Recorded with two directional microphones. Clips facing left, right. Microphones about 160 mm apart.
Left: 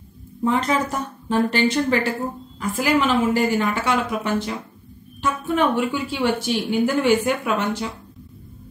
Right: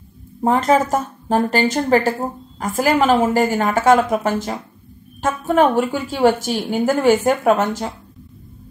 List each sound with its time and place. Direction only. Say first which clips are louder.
0.4 s a woman's voice: right 5 dB; 45° right (ahead or behind)